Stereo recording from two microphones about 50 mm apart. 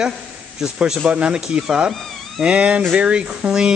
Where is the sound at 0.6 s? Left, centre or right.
Centre.